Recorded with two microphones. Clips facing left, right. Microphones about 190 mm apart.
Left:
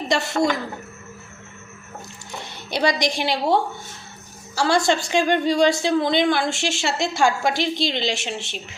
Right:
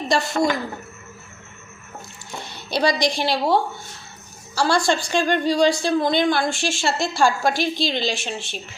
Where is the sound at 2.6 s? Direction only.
20° left (ahead or behind).